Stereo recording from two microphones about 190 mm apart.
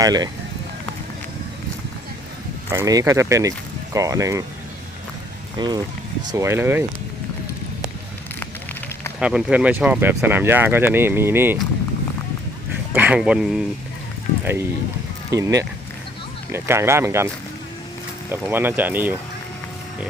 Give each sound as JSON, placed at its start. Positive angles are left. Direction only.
{"t": 0.0, "sound": "speech", "side_deg": -20}
{"t": 2.6, "sound": "speech", "side_deg": -15}
{"t": 5.5, "sound": "speech", "side_deg": -20}
{"t": 9.2, "sound": "speech", "side_deg": -5}
{"t": 12.9, "sound": "speech", "side_deg": -10}
{"t": 15.3, "sound": "speech", "side_deg": -15}
{"t": 18.3, "sound": "speech", "side_deg": -10}